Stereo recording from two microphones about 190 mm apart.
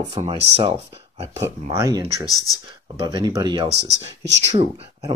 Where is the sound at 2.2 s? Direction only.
20° left (ahead or behind).